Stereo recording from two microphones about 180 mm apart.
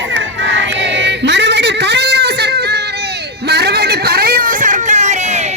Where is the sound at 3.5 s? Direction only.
65° right (ahead or behind).